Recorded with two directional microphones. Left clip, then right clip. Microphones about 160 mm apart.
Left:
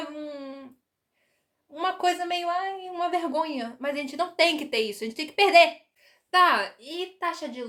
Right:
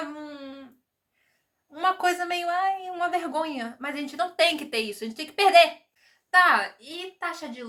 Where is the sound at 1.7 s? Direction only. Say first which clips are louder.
Right 2 dB; 5° left (ahead or behind).